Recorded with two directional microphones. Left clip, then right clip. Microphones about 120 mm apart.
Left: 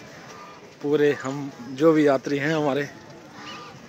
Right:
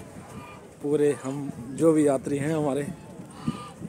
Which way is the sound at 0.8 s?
10° right (ahead or behind).